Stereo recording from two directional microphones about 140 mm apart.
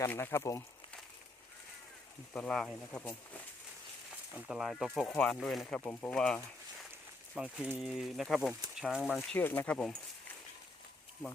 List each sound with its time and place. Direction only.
0.0 s speech: 20° left (ahead or behind)
2.3 s speech: 5° left (ahead or behind)
4.4 s speech: 5° right (ahead or behind)
5.6 s speech: 10° left (ahead or behind)
7.3 s speech: 10° right (ahead or behind)
9.3 s speech: 10° left (ahead or behind)